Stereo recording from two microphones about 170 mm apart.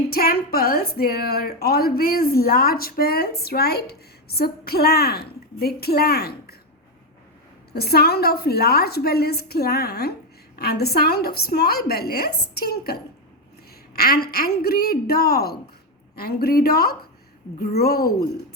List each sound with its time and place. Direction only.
0.1 s a woman's voice: 65° left (ahead or behind)
7.7 s a woman's voice: 65° left (ahead or behind)